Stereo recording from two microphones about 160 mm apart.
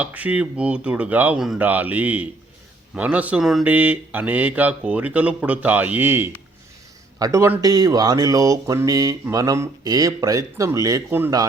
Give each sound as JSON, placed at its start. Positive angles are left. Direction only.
{"t": 0.0, "sound": "speech", "side_deg": -10}